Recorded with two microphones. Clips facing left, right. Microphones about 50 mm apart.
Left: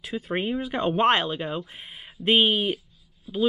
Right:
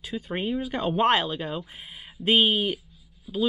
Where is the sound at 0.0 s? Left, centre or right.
Centre.